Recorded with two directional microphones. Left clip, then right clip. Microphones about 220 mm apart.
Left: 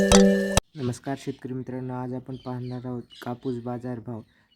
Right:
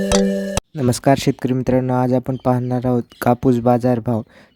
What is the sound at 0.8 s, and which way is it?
Speech, 40° right (ahead or behind).